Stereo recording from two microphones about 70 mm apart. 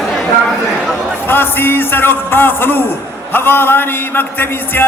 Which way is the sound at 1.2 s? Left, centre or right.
Left.